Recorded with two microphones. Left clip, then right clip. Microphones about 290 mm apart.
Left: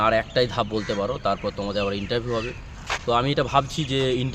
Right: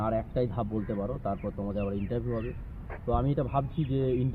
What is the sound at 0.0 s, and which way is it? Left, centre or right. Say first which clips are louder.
Speech: left 10 dB; left.